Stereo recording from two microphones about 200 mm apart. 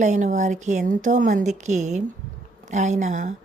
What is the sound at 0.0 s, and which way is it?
A woman's voice, 40° right (ahead or behind).